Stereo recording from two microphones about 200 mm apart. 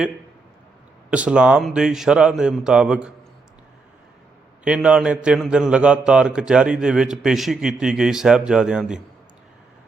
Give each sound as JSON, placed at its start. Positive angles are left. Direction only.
{"t": 1.1, "sound": "a man's voice", "side_deg": -5}
{"t": 4.6, "sound": "a man's voice", "side_deg": -5}